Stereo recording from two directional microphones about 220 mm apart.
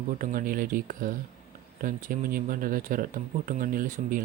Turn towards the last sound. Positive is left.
turn(degrees=-35)  # may be behind; listen again after turning